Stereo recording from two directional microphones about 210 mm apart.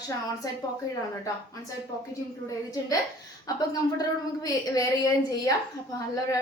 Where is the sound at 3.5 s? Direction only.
15° left (ahead or behind).